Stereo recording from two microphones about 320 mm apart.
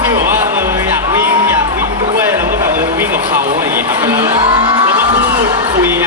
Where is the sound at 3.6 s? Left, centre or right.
Centre.